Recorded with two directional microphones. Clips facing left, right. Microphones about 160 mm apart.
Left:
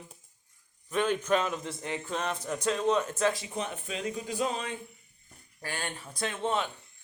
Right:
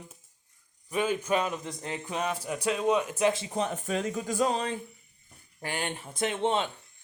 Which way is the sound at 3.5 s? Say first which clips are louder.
Right 5 dB; 40° right (ahead or behind).